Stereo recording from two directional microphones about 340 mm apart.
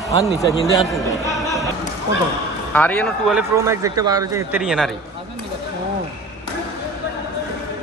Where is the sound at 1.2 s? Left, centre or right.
Centre.